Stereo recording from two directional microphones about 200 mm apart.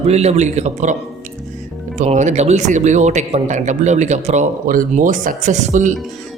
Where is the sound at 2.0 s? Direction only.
35° right (ahead or behind).